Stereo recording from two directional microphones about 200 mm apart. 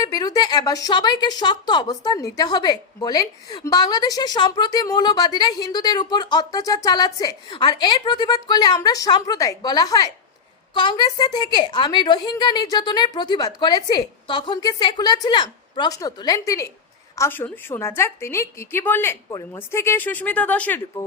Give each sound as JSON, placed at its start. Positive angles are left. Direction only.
{"t": 0.0, "sound": "a woman's voice", "side_deg": 20}